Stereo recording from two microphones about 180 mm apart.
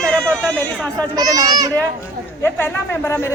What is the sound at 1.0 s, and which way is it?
Speech, 20° right (ahead or behind).